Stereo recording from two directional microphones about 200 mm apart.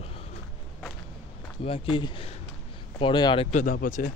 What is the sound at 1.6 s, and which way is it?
Speech, 25° left (ahead or behind).